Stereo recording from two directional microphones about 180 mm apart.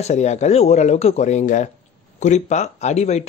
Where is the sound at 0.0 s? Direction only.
40° left (ahead or behind).